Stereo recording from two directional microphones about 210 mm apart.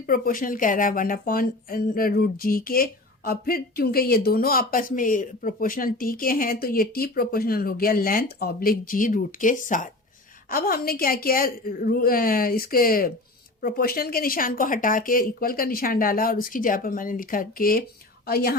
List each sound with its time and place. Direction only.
0.0 s speech: 40° left (ahead or behind)